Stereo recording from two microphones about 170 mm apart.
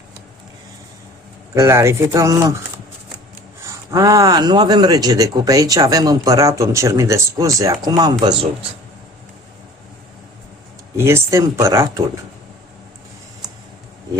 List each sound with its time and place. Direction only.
1.5 s speech: 15° right (ahead or behind)
3.6 s speech: 20° right (ahead or behind)
10.9 s speech: 15° right (ahead or behind)